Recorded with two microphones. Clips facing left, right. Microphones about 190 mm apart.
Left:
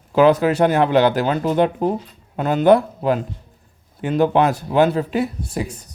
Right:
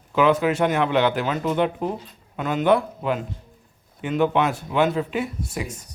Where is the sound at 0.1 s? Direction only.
35° left (ahead or behind).